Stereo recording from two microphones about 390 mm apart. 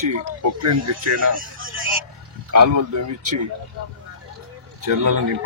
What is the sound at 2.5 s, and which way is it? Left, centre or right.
Speech, right.